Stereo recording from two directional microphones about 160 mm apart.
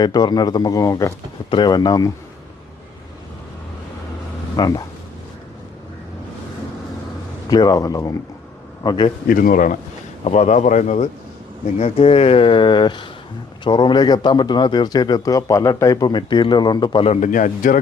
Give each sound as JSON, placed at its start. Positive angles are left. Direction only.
{"t": 0.0, "sound": "speech", "side_deg": 25}
{"t": 4.5, "sound": "speech", "side_deg": 25}
{"t": 7.5, "sound": "a man's voice", "side_deg": 25}
{"t": 9.2, "sound": "speech", "side_deg": 60}
{"t": 10.2, "sound": "speech", "side_deg": 40}
{"t": 17.2, "sound": "speech", "side_deg": 55}